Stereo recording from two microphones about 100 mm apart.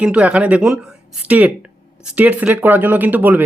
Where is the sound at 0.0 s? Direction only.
10° right (ahead or behind).